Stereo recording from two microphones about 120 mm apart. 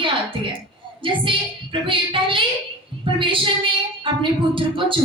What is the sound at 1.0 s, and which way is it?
A woman's voice, 45° right (ahead or behind).